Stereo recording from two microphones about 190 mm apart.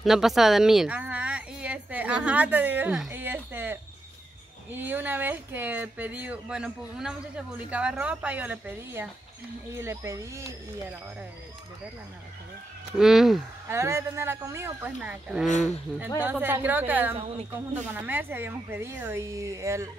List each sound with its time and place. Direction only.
0.0 s a sound: centre (ahead or behind)
4.6 s speech: 10° right (ahead or behind)
12.9 s speech: centre (ahead or behind)
13.7 s speech: 15° right (ahead or behind)
15.4 s speech: 40° left (ahead or behind)
16.2 s speech: 10° right (ahead or behind)